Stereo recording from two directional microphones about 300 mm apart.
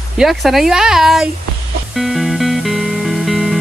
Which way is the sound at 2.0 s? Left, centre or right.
Centre.